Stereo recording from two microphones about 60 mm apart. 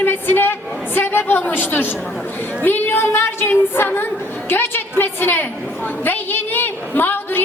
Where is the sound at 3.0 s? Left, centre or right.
Left.